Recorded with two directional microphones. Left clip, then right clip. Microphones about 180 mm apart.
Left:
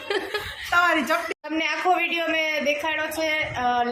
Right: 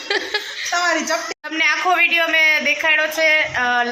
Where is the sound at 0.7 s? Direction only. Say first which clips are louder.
Right 1 dB; 55° left (ahead or behind).